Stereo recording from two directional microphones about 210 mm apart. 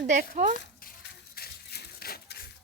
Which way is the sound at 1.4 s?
45° left (ahead or behind).